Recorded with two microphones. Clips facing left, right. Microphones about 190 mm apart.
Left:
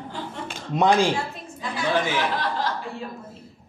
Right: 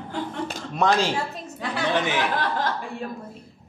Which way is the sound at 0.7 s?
15° left (ahead or behind).